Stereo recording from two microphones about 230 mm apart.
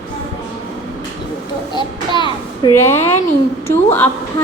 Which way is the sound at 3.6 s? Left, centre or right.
Centre.